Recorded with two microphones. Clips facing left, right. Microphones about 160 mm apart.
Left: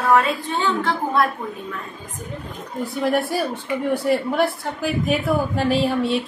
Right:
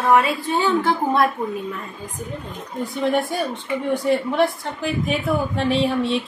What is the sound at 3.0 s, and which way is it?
A woman's voice, 5° left (ahead or behind).